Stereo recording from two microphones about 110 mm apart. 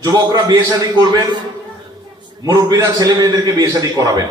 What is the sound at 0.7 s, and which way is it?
Speech, 40° right (ahead or behind).